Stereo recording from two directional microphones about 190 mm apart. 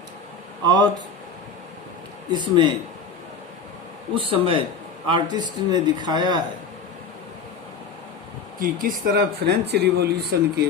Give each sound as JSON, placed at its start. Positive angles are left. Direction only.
{"t": 0.6, "sound": "speech", "side_deg": -20}
{"t": 2.3, "sound": "speech", "side_deg": -25}
{"t": 4.1, "sound": "speech", "side_deg": -25}
{"t": 8.5, "sound": "speech", "side_deg": -50}